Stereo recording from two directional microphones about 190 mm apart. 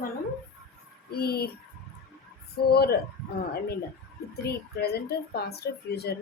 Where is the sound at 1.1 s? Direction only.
55° left (ahead or behind).